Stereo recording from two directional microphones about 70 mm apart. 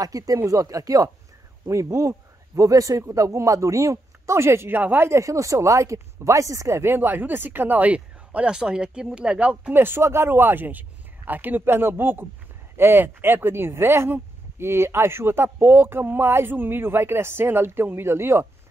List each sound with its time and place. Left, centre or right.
0.0 s speech: right
5.1 s speech: right
6.9 s speech: right
9.8 s speech: right